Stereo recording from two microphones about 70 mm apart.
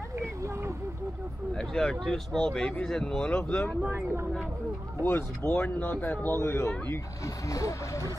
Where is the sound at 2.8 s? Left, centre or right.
Centre.